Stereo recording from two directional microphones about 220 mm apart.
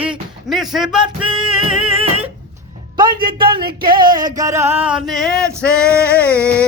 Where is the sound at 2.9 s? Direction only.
20° right (ahead or behind); by 5.5 s centre (ahead or behind).